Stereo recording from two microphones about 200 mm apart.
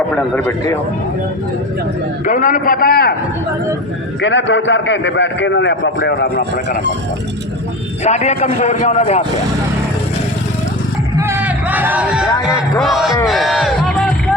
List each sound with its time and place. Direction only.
2.2 s a man's voice: 40° left (ahead or behind)
4.2 s a man's voice: 65° left (ahead or behind)
8.0 s a man's voice: 35° left (ahead or behind)
11.2 s a sound: 10° right (ahead or behind)
12.3 s speech: 15° left (ahead or behind)
12.8 s speech: centre (ahead or behind)
13.2 s crowd: centre (ahead or behind)